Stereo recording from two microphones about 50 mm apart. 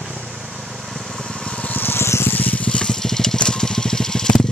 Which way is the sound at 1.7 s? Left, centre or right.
Left.